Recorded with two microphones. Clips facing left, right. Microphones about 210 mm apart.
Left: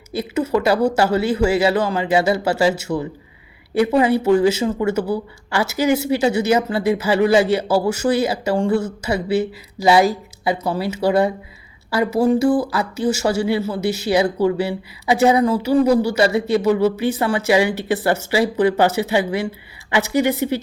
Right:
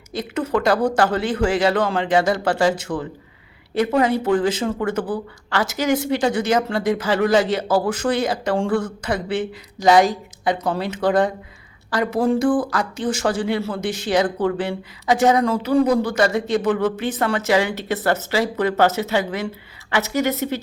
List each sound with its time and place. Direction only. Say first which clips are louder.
0.1 s speech: left 3 dB; 10° left (ahead or behind)